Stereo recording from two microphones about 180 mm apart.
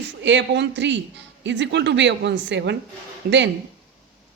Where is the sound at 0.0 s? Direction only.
85° right.